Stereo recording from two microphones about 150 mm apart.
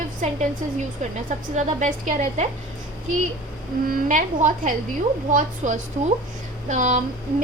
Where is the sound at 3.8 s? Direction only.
65° right (ahead or behind).